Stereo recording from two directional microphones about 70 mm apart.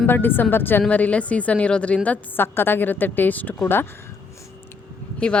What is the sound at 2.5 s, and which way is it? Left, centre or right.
A woman's voice, left.